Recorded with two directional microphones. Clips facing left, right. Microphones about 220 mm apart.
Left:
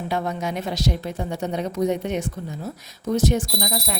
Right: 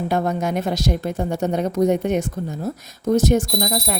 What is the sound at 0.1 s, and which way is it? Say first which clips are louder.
Speech: right 4 dB; 45° right (ahead or behind).